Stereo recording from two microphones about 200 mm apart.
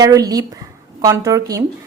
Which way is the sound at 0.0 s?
15° right (ahead or behind).